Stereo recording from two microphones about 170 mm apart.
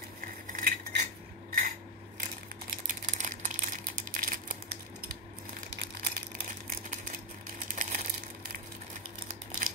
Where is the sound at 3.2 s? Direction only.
45° right (ahead or behind).